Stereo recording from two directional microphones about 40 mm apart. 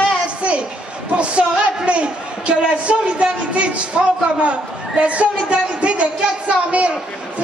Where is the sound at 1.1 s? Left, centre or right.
Right.